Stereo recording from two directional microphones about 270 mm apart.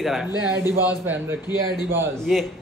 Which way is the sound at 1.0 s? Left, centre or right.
Centre.